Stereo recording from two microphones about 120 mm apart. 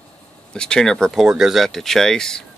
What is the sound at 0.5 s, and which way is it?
Speech, 5° left (ahead or behind).